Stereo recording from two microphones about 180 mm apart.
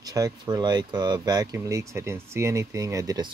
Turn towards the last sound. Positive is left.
turn(degrees=-20)  # may be behind; listen again after turning